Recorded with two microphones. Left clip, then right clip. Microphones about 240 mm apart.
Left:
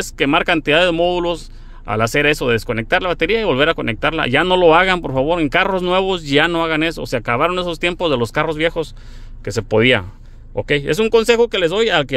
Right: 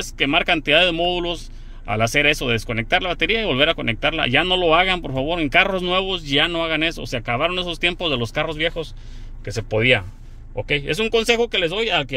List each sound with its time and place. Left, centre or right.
0.0 s speech: left